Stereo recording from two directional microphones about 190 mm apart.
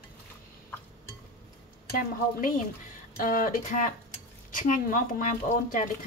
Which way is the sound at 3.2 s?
45° left (ahead or behind).